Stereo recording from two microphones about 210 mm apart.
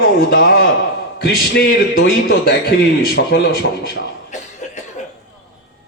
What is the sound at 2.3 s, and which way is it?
A man's voice, 50° left (ahead or behind).